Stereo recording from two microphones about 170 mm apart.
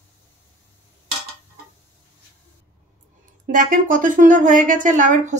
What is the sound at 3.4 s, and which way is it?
Speech, 50° right (ahead or behind).